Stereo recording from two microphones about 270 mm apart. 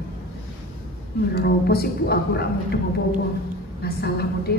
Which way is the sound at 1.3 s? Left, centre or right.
Left.